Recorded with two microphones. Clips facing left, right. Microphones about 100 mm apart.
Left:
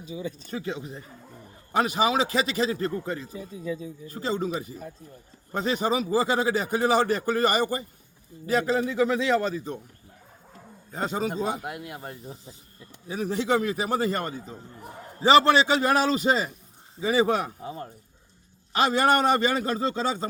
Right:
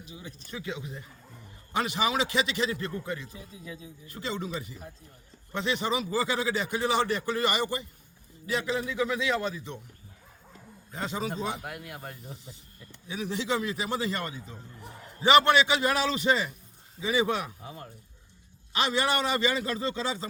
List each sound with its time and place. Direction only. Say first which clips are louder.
0.5 s a man's voice: left 1 dB; 35° left (ahead or behind)
10.9 s a man's voice: left 5 dB; 40° left (ahead or behind)
11.6 s speech: left 4 dB; 20° left (ahead or behind)
12.2 s a man's voice: left 3 dB; 35° left (ahead or behind)
18.7 s a man's voice: left 6 dB; 45° left (ahead or behind)